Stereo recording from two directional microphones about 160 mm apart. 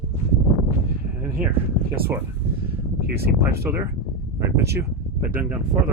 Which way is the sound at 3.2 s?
80° right.